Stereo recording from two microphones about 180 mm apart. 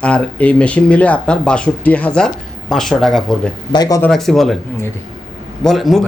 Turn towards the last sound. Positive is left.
turn(degrees=0)  # may be behind; listen again after turning